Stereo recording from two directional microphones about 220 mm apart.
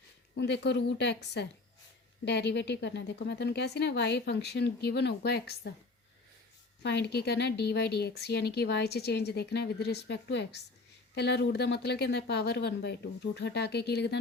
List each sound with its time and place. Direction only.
0.3 s a woman's voice: 50° left (ahead or behind)
6.8 s a woman's voice: 50° left (ahead or behind)